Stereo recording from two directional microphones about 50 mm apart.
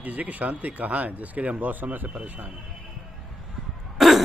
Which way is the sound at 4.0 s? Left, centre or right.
Centre.